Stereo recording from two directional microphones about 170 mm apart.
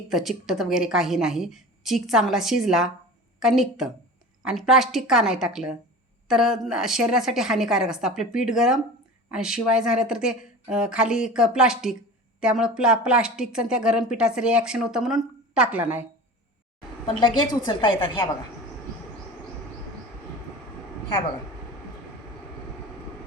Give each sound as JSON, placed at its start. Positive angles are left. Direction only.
{"t": 0.1, "sound": "speech", "side_deg": 0}
{"t": 17.7, "sound": "a woman's voice", "side_deg": 25}